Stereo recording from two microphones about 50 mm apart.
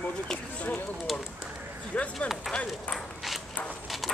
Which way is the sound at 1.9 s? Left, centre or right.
Left.